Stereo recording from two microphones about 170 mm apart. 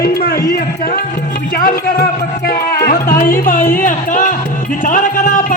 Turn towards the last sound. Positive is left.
turn(degrees=50)  # may be behind; listen again after turning